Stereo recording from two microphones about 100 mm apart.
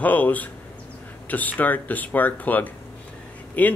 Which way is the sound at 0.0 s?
15° left (ahead or behind).